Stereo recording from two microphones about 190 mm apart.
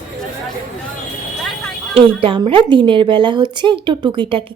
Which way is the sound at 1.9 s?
30° right (ahead or behind).